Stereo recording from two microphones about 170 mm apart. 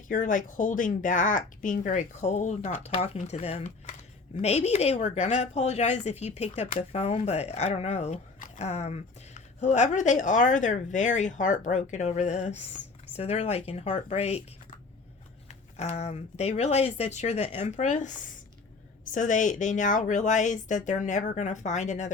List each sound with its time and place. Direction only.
0.1 s speech: 50° left (ahead or behind)
2.9 s speech: 35° left (ahead or behind)
15.4 s speech: 40° left (ahead or behind)